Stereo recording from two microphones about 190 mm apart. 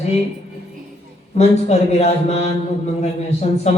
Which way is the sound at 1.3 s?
35° left (ahead or behind).